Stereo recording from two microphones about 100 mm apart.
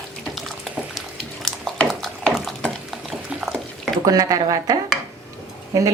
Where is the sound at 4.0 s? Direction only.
40° right (ahead or behind).